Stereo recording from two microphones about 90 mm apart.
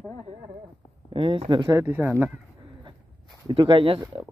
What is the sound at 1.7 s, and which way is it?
Speech, 30° right (ahead or behind).